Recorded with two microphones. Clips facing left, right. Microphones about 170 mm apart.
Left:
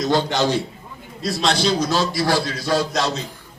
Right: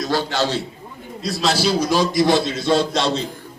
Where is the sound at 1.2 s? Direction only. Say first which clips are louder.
Even; centre (ahead or behind).